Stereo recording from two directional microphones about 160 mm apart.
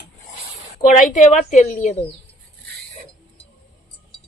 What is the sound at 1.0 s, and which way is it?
A woman's voice, 55° left (ahead or behind).